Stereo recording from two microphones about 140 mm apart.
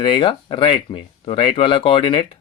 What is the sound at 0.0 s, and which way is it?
Speech, 40° left (ahead or behind).